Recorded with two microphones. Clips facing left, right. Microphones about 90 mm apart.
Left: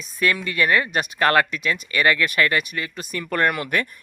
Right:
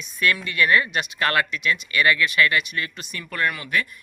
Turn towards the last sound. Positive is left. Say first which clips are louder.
# left 3 dB
turn(degrees=55)  # may be behind; listen again after turning